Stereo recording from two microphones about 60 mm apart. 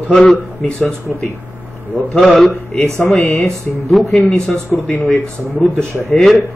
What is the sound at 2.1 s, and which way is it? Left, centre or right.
A man's voice, centre.